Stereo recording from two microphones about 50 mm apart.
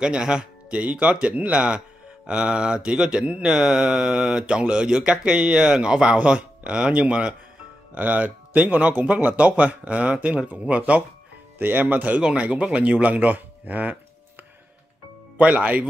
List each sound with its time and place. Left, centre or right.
0.0 s speech: centre
3.4 s speech: centre; by 13.9 s right
15.3 s speech: right